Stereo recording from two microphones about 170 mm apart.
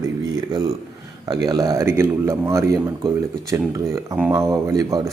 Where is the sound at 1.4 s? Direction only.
20° right (ahead or behind).